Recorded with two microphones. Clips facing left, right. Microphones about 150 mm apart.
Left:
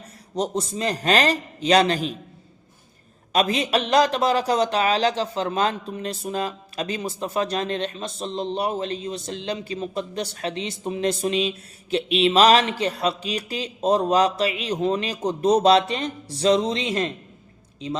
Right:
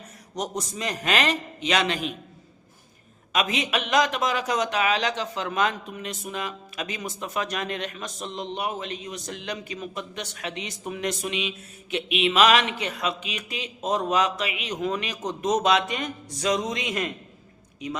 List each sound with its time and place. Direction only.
0.3 s a man's voice: 30° left (ahead or behind)
3.3 s a man's voice: 35° left (ahead or behind)